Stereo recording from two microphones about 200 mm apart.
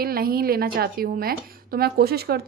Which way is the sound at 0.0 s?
50° right (ahead or behind).